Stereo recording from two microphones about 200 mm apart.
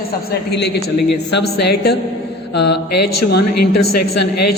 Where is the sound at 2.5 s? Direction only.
55° left (ahead or behind).